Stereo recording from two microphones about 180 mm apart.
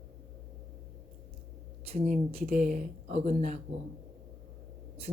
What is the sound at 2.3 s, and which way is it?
A woman's voice, 40° right (ahead or behind).